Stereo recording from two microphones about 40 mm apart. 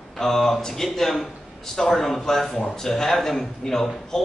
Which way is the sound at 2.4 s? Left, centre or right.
Left.